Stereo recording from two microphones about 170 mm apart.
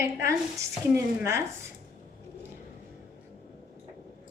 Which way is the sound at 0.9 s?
15° right (ahead or behind).